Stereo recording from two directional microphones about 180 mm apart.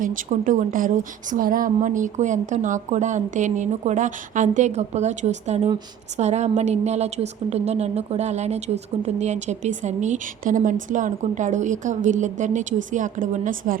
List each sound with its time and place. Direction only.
0.0 s a woman's voice: 50° right (ahead or behind)